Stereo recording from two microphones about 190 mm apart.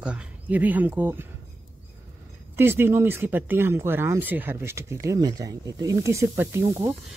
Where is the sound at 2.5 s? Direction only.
10° right (ahead or behind).